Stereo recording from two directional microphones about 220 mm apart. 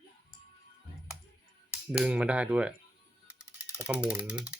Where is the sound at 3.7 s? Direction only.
5° right (ahead or behind).